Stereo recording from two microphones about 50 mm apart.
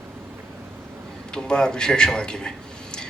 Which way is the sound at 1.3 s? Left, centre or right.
Centre.